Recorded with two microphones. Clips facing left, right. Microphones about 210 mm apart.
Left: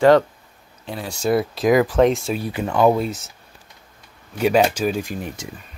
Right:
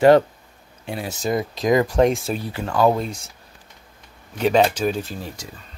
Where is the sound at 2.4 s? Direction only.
15° left (ahead or behind).